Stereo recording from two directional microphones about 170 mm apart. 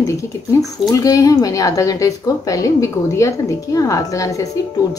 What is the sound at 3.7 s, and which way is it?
Speech, 20° left (ahead or behind).